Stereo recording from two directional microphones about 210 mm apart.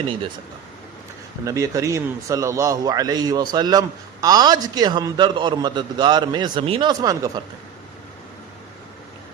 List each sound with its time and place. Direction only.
1.5 s a man's voice: 15° right (ahead or behind)